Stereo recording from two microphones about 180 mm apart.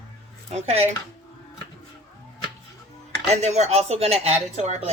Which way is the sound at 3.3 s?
40° right (ahead or behind).